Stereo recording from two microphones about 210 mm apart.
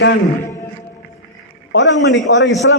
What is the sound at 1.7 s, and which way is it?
Speech, 60° left (ahead or behind).